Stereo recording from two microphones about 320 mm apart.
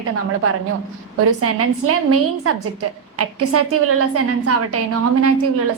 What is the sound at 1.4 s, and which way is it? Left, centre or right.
A woman's voice, right.